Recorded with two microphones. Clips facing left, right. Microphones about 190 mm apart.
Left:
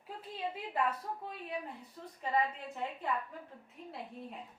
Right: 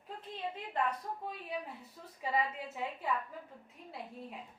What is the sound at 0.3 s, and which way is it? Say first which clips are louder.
A woman's voice: left 1 dB; 5° left (ahead or behind).